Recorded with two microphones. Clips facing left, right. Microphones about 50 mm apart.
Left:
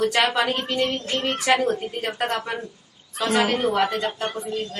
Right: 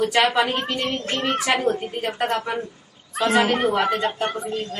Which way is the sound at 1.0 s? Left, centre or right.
Right.